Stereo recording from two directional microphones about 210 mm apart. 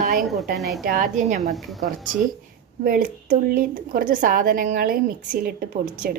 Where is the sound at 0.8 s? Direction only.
40° right (ahead or behind).